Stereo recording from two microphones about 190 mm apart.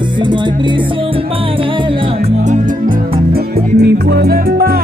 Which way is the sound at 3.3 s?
55° right (ahead or behind).